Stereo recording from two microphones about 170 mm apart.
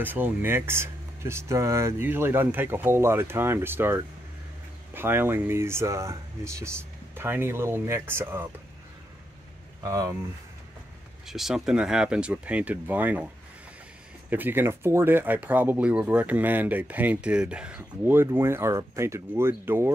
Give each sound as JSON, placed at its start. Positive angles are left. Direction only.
{"t": 0.0, "sound": "speech", "side_deg": -10}
{"t": 9.8, "sound": "speech", "side_deg": -20}
{"t": 11.2, "sound": "speech", "side_deg": 0}
{"t": 14.3, "sound": "speech", "side_deg": -10}